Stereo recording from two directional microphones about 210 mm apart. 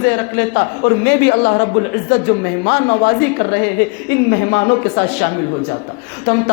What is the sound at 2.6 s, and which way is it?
Speech, 50° left (ahead or behind).